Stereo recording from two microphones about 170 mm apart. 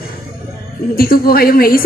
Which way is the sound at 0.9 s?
60° left (ahead or behind).